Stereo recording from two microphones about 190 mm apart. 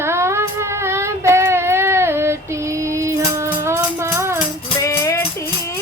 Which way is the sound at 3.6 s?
15° right (ahead or behind).